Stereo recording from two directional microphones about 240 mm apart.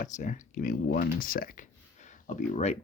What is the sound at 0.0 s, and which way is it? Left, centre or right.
Speech, left.